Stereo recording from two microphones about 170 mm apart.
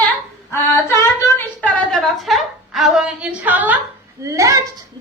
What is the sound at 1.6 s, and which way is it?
A woman's voice, 5° left (ahead or behind).